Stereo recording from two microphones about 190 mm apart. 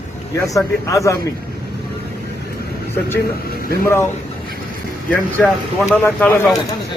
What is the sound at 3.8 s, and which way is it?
Speech, 10° left (ahead or behind).